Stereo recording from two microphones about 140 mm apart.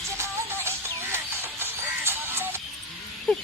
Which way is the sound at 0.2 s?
15° right (ahead or behind).